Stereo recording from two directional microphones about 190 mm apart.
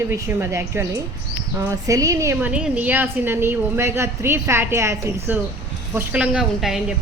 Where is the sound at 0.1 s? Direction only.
15° right (ahead or behind).